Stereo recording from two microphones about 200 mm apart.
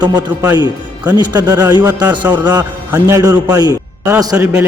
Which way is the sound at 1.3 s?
15° right (ahead or behind).